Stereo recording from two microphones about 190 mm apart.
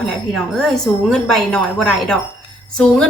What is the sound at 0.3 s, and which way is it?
Speech, 5° left (ahead or behind).